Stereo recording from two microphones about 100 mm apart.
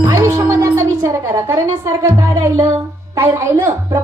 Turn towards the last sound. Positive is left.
turn(degrees=-25)  # may be behind; listen again after turning